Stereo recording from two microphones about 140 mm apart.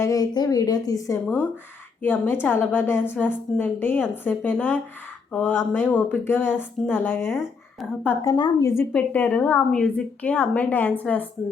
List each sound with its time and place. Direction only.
0.0 s a woman's voice: 25° left (ahead or behind)
7.3 s speech: centre (ahead or behind)
8.0 s a woman's voice: 20° left (ahead or behind)
8.9 s a woman's voice: 10° left (ahead or behind)